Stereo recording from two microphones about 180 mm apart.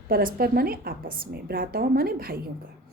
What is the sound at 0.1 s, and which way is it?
A woman's voice, 55° right (ahead or behind).